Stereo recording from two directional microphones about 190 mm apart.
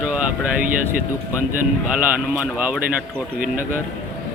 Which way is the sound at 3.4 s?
45° right (ahead or behind).